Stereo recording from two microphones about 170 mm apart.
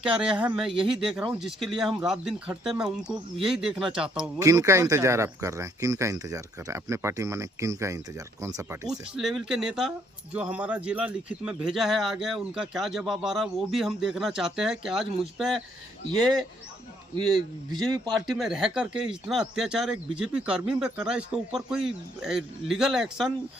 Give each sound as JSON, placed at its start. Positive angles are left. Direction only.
{"t": 0.0, "sound": "speech", "side_deg": -5}
{"t": 4.2, "sound": "speech", "side_deg": -20}
{"t": 8.9, "sound": "speech", "side_deg": -5}
{"t": 17.2, "sound": "speech", "side_deg": 0}